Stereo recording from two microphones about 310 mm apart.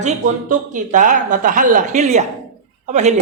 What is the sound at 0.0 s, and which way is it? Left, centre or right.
A man's voice, right.